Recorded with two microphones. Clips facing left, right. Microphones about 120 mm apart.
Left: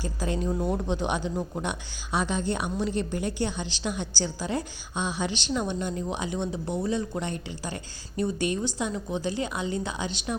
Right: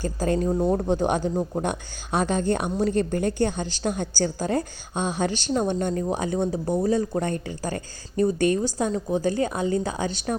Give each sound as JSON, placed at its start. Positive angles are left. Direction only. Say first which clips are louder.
{"t": 0.0, "sound": "a woman's voice", "louder": "right 6 dB", "side_deg": -45}
{"t": 0.4, "sound": "speech", "louder": "right 4 dB", "side_deg": -30}
{"t": 0.8, "sound": "a woman's voice", "louder": "right 5 dB", "side_deg": -45}
{"t": 1.3, "sound": "speech", "louder": "right 5 dB", "side_deg": -30}
{"t": 2.1, "sound": "a woman's voice", "louder": "right 4 dB", "side_deg": -50}